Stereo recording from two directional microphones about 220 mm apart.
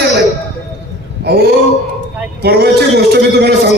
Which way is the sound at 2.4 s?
50° right (ahead or behind).